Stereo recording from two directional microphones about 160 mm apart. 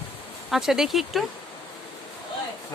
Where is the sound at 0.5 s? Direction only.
5° right (ahead or behind).